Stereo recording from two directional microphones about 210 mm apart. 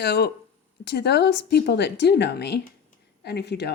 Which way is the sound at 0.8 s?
50° left (ahead or behind).